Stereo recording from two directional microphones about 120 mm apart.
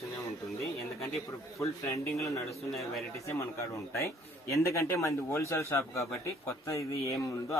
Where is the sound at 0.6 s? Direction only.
Centre (ahead or behind).